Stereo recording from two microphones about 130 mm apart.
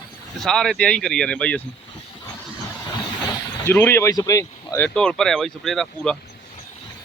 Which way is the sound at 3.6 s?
20° left (ahead or behind).